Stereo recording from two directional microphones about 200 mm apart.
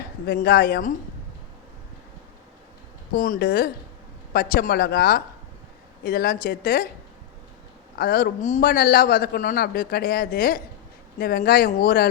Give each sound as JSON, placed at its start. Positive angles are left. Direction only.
{"t": 0.3, "sound": "a man's voice", "side_deg": 50}
{"t": 3.2, "sound": "a man's voice", "side_deg": 45}
{"t": 7.9, "sound": "a man's voice", "side_deg": 50}